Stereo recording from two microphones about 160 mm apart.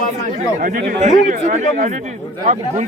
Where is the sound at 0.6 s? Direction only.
55° right (ahead or behind).